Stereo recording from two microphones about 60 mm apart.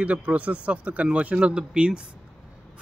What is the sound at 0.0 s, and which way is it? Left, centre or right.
Speech, right.